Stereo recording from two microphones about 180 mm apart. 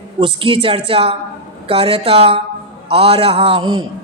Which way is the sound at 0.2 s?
30° right (ahead or behind).